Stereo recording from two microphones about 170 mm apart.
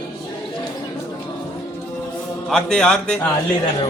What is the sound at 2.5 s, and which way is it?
Speech, 5° left (ahead or behind).